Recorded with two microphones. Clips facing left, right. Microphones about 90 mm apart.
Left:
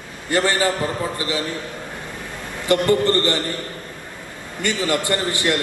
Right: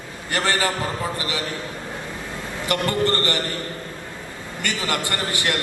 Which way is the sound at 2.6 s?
25° left (ahead or behind).